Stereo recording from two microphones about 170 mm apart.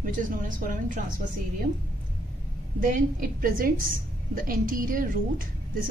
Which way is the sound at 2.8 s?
55° right (ahead or behind).